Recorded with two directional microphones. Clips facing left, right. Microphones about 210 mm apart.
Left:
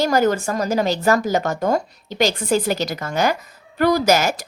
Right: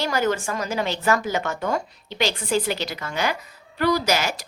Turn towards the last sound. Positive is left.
turn(degrees=45)  # may be behind; listen again after turning